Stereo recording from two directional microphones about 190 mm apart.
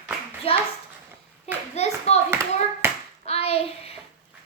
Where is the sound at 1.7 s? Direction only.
35° left (ahead or behind).